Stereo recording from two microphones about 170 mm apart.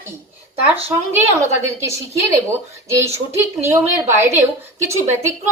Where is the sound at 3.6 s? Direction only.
15° right (ahead or behind).